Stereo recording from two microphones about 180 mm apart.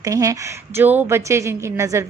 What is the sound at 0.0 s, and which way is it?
A woman's voice, 20° right (ahead or behind).